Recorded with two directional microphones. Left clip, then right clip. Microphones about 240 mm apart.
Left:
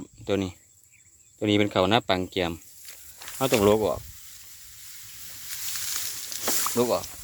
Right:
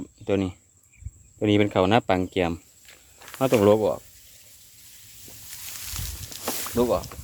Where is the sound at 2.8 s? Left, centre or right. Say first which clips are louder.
Left 3 dB; left.